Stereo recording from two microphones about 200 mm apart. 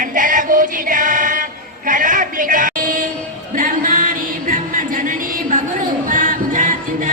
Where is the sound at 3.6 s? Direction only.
40° right (ahead or behind).